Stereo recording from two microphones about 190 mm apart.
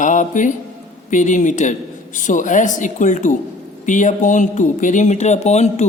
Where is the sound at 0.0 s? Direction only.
40° left (ahead or behind).